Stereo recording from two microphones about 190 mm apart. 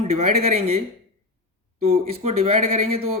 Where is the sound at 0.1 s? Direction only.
35° right (ahead or behind).